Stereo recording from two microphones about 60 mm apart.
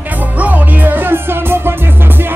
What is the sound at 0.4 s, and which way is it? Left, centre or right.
Music, right.